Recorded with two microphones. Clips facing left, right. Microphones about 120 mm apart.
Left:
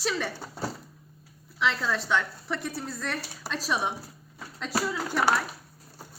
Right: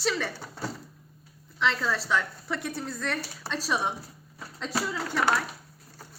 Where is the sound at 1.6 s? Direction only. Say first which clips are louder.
Even; centre (ahead or behind).